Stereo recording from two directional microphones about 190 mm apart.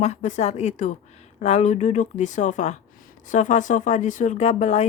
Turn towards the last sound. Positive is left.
turn(degrees=35)  # may be behind; listen again after turning